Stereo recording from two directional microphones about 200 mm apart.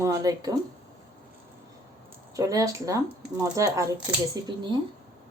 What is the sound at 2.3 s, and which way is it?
A woman's voice, 15° right (ahead or behind).